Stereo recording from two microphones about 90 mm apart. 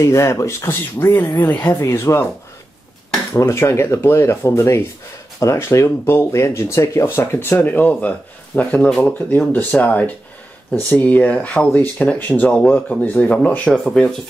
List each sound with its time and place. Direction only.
0.0 s speech: 30° left (ahead or behind)
3.3 s speech: 30° left (ahead or behind); by 14.1 s 10° left (ahead or behind)